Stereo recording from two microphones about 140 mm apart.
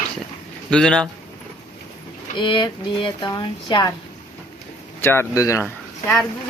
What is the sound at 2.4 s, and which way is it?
Speech, 35° left (ahead or behind).